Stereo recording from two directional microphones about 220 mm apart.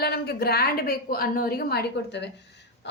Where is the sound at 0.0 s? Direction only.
45° left (ahead or behind).